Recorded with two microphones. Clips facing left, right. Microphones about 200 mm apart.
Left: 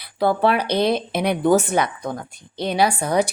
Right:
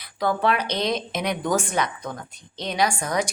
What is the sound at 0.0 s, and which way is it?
Speech, 30° left (ahead or behind).